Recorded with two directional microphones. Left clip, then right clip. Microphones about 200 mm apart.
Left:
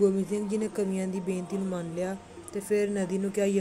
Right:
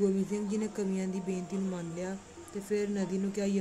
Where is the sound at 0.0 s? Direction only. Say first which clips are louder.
Left 5 dB; 10° left (ahead or behind).